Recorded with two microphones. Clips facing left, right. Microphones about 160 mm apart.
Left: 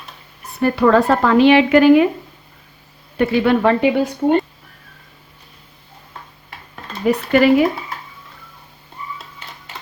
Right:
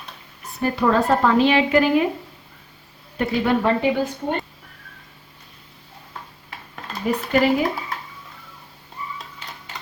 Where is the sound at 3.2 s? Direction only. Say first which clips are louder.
Left 5 dB; 70° left (ahead or behind).